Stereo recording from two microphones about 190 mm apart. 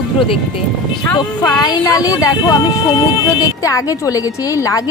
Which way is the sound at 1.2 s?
20° left (ahead or behind).